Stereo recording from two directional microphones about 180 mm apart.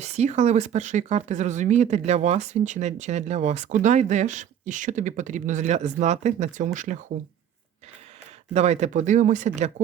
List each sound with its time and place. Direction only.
0.0 s speech: 40° right (ahead or behind)
8.5 s speech: 40° right (ahead or behind)